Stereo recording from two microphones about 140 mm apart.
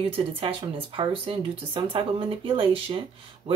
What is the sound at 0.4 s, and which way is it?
Speech, 40° right (ahead or behind).